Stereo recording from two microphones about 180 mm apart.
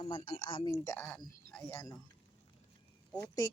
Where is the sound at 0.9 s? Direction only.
10° left (ahead or behind).